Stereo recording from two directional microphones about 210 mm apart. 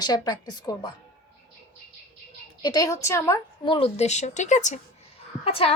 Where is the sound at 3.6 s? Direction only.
25° left (ahead or behind).